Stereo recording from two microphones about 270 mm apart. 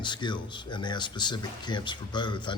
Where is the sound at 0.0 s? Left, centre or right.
Centre.